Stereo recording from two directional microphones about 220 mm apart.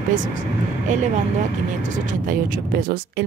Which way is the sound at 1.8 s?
35° right (ahead or behind).